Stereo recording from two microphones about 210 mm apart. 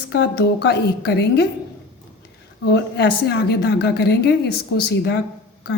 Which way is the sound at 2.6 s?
50° left (ahead or behind).